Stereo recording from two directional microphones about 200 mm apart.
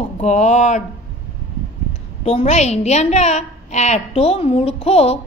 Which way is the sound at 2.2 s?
30° left (ahead or behind).